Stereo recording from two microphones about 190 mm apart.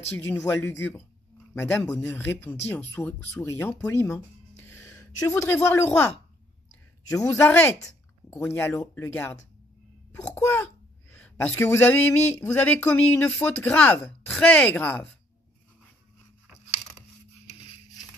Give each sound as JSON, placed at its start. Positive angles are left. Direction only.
{"t": 0.3, "sound": "a child's voice", "side_deg": 10}